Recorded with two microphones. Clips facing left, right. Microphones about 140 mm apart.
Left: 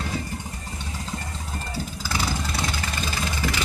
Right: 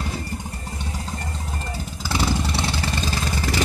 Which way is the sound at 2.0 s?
25° right (ahead or behind).